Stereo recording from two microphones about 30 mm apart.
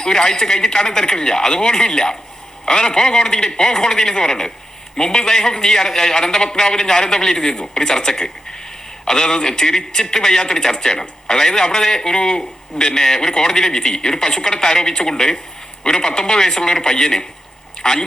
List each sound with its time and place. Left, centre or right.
0.0 s a man's voice: left